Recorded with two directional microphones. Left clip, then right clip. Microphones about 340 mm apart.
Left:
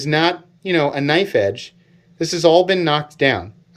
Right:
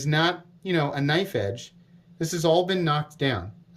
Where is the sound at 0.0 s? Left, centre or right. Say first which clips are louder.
Left 7 dB; centre.